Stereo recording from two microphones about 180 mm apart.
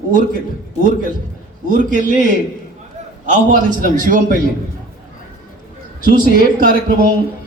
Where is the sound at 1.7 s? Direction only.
45° right (ahead or behind).